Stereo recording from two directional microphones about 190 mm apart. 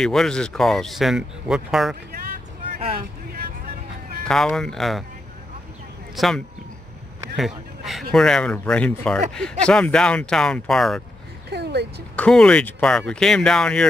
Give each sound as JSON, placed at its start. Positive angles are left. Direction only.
{"t": 0.0, "sound": "speech", "side_deg": 0}
{"t": 4.2, "sound": "speech", "side_deg": 5}
{"t": 6.1, "sound": "speech", "side_deg": 0}
{"t": 11.5, "sound": "a sound", "side_deg": -60}
{"t": 12.2, "sound": "speech", "side_deg": 5}